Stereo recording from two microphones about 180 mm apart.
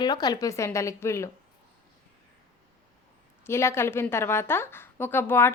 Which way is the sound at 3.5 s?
15° left (ahead or behind).